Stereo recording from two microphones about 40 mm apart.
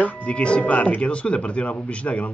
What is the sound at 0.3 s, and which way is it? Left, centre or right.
Speech, left.